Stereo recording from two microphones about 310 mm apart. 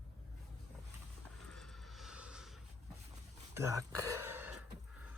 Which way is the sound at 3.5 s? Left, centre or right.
Centre.